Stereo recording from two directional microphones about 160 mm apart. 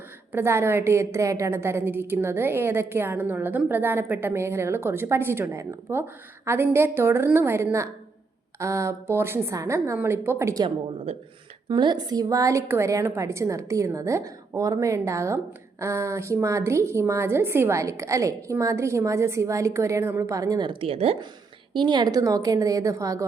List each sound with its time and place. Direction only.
0.3 s a woman's voice: 15° right (ahead or behind)
11.7 s a woman's voice: 30° right (ahead or behind)